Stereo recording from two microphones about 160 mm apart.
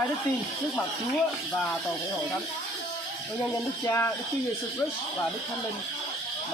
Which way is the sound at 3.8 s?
15° left (ahead or behind).